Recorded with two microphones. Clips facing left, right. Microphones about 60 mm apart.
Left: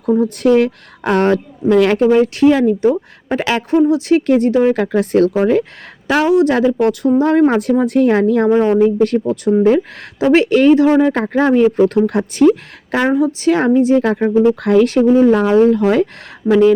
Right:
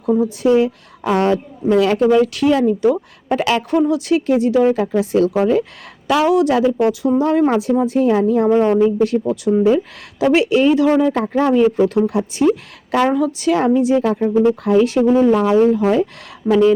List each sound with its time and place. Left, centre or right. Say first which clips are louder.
0.3 s speech: left 2 dB; left
2.0 s speech: left 3 dB; left
3.2 s speech: even; left
4.3 s speech: even; left
6.2 s speech: left 3 dB; left
6.5 s speech: left 1 dB; left
7.7 s speech: left 2 dB; left
8.4 s speech: even; left
8.8 s speech: left 2 dB; left
12.9 s a woman's voice: left 1 dB; left
13.4 s speech: left 2 dB; left
16.5 s speech: left 2 dB; left